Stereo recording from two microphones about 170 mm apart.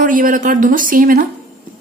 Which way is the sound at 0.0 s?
55° right (ahead or behind).